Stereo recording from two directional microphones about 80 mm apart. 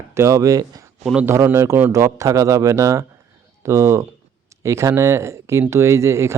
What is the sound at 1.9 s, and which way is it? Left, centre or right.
Speech, right.